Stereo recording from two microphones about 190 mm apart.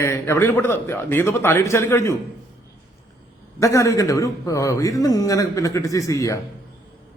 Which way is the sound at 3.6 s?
15° left (ahead or behind).